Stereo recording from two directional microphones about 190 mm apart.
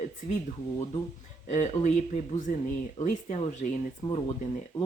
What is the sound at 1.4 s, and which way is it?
Speech, 40° left (ahead or behind).